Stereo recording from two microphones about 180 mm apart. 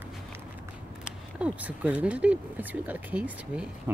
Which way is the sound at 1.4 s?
5° right (ahead or behind).